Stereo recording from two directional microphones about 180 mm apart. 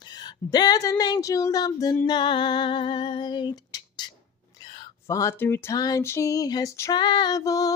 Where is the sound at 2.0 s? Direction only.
25° left (ahead or behind).